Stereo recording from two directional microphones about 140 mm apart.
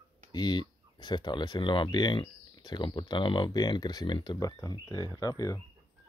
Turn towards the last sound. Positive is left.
turn(degrees=25)  # may be behind; listen again after turning